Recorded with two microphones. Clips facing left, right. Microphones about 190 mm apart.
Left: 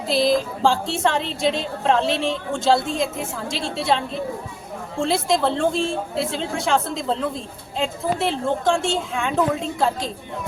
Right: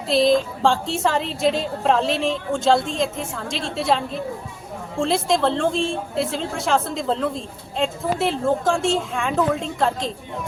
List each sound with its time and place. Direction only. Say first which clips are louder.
0.1 s a woman's voice: right 2 dB; centre (ahead or behind)